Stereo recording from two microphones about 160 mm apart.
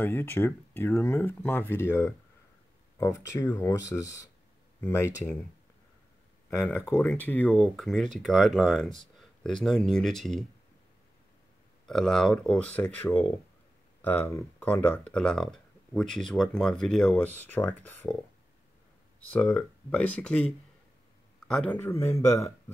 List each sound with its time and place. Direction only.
0.0 s speech: 15° left (ahead or behind)
6.5 s speech: 15° left (ahead or behind)
7.5 s speech: centre (ahead or behind)
11.8 s speech: 5° left (ahead or behind)
19.3 s speech: 10° left (ahead or behind)